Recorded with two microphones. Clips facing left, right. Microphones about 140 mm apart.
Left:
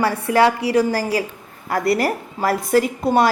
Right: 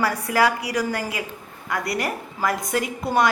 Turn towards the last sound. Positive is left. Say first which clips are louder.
# left 5 dB
turn(degrees=30)  # may be behind; listen again after turning